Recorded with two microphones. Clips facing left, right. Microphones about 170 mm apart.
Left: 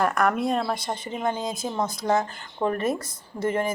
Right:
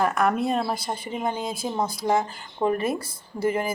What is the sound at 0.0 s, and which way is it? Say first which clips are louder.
A woman's voice: even; 5° right (ahead or behind).